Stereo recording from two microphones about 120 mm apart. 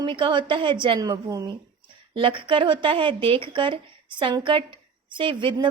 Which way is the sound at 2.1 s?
45° right (ahead or behind).